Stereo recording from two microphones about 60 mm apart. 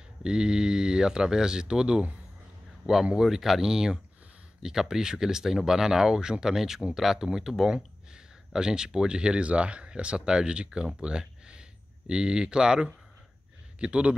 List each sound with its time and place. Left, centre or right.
0.2 s speech: centre